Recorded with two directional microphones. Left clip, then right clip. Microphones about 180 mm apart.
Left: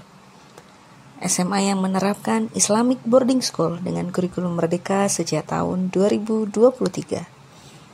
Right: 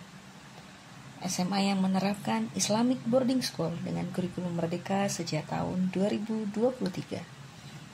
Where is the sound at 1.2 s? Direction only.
45° left (ahead or behind).